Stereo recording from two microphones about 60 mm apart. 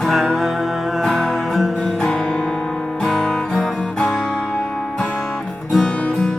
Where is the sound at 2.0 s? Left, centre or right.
Centre.